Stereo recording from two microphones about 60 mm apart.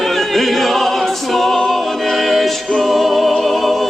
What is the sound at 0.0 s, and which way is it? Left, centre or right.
Music, centre.